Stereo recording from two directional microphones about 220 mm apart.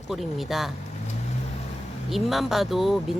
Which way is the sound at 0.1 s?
Centre (ahead or behind).